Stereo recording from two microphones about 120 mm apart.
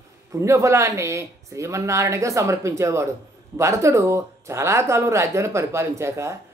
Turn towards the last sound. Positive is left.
turn(degrees=-25)  # may be behind; listen again after turning